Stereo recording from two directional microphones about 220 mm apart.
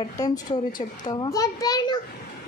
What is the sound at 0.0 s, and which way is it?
A child's voice, 15° left (ahead or behind).